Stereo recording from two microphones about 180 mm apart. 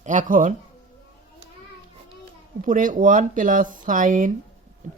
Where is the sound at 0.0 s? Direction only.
45° right (ahead or behind).